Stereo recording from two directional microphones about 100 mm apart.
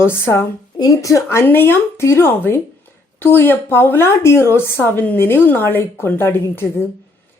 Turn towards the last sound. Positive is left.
turn(degrees=25)  # may be behind; listen again after turning